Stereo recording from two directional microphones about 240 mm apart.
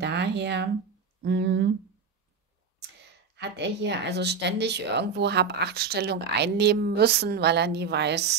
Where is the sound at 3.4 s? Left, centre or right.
Right.